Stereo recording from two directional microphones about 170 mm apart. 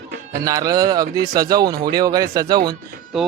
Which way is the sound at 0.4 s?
20° right (ahead or behind).